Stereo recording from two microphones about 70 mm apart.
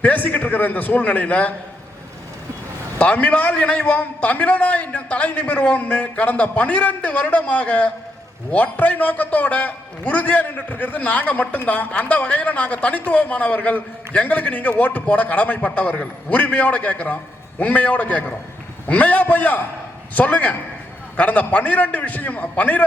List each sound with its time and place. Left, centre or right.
0.0 s a man's voice: left
3.0 s a man's voice: centre